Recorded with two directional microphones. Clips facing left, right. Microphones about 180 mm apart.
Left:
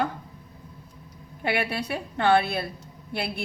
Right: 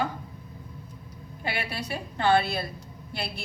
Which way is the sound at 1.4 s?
60° left (ahead or behind).